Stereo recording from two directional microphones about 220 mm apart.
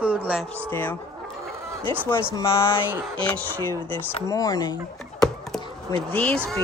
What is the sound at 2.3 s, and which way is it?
Speech, 15° left (ahead or behind).